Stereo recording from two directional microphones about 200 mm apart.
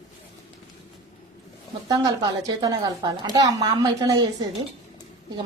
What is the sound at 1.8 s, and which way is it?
A woman's voice, 20° right (ahead or behind).